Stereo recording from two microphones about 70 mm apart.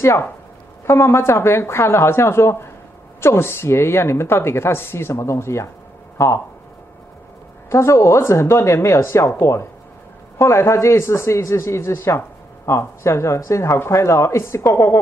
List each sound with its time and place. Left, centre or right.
0.0 s speech: left
7.7 s speech: left